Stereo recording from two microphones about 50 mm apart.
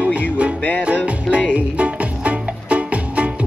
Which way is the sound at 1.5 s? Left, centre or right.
Right.